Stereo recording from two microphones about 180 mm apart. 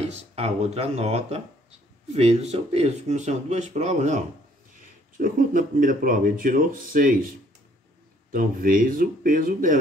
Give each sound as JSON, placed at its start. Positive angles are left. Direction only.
{"t": 0.1, "sound": "speech", "side_deg": -35}
{"t": 8.3, "sound": "speech", "side_deg": -50}